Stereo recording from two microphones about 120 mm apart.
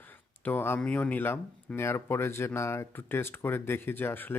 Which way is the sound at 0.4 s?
20° left (ahead or behind).